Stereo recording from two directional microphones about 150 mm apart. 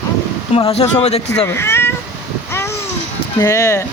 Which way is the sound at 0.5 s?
55° left (ahead or behind).